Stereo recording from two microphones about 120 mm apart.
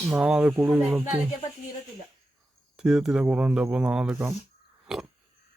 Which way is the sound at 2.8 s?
5° right (ahead or behind).